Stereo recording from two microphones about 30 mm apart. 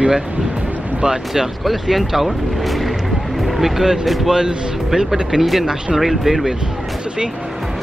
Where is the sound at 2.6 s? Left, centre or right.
Centre.